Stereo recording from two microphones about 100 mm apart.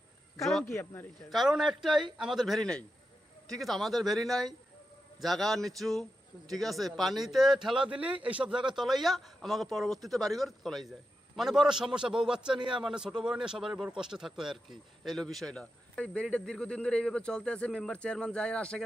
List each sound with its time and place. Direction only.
0.3 s a sound: centre (ahead or behind)
0.7 s speech: 25° left (ahead or behind)
1.3 s a man's voice: centre (ahead or behind)